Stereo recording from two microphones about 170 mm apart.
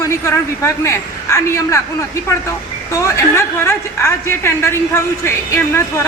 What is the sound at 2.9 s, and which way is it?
A woman's voice, 15° left (ahead or behind).